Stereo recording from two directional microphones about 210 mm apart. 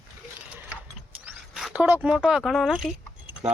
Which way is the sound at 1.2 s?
5° right (ahead or behind).